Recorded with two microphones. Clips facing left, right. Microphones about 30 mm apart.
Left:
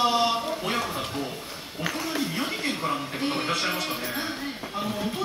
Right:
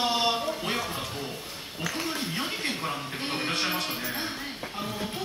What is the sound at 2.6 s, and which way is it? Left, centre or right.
Speech, centre.